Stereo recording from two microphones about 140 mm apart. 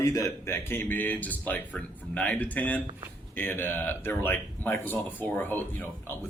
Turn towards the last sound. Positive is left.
turn(degrees=15)  # may be behind; listen again after turning